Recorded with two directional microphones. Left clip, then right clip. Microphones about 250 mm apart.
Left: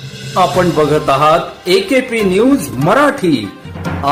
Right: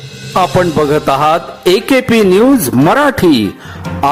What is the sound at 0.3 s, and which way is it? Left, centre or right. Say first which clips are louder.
A man's voice: right 1 dB; right.